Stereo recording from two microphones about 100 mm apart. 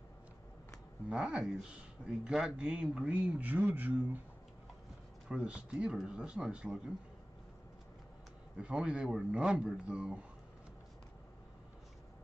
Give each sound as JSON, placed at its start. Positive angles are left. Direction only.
{"t": 1.0, "sound": "speech", "side_deg": -10}
{"t": 5.3, "sound": "speech", "side_deg": -10}
{"t": 8.5, "sound": "speech", "side_deg": -10}